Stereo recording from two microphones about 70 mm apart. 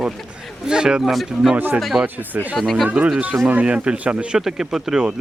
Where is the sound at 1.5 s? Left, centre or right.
Right.